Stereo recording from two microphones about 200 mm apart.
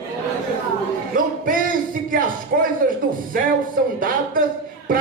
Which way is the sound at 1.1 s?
45° right (ahead or behind).